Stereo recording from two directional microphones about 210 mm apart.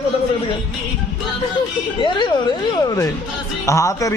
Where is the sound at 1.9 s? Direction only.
20° left (ahead or behind).